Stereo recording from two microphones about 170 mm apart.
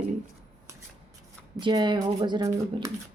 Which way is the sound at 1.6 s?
25° right (ahead or behind).